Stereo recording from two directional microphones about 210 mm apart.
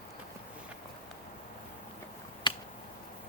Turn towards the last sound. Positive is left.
turn(degrees=20)  # may be behind; listen again after turning